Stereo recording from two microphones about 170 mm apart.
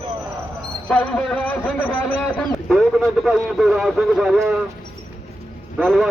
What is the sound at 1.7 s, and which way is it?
A man's voice, 10° left (ahead or behind).